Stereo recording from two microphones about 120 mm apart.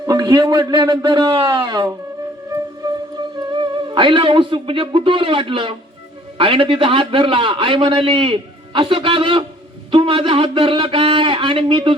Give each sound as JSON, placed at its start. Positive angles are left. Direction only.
{"t": 0.0, "sound": "speech", "side_deg": -35}
{"t": 3.2, "sound": "a man's voice", "side_deg": -40}